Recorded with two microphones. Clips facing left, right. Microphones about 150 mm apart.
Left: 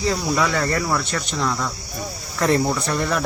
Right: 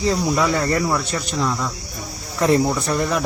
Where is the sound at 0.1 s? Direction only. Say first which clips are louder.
Right 2 dB; centre (ahead or behind).